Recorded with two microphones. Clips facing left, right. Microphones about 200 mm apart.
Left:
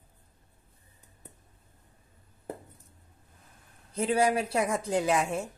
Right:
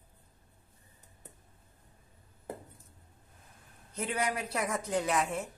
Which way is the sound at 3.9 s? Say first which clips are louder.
Left 8 dB; 30° left (ahead or behind).